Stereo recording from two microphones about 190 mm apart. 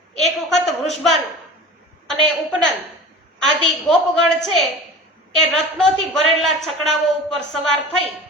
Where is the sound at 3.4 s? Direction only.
Centre (ahead or behind).